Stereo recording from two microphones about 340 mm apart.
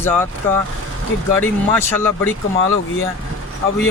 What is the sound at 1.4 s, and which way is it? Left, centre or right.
Speech, centre.